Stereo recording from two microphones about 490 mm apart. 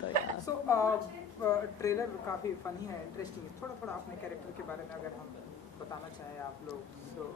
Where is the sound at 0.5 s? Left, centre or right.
Centre.